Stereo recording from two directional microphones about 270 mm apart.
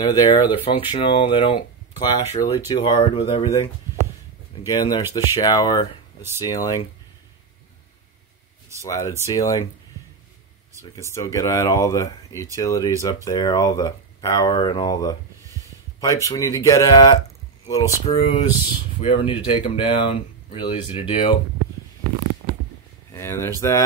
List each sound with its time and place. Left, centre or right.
0.0 s speech: centre
4.6 s speech: centre
8.8 s speech: centre
10.8 s speech: centre
23.1 s speech: centre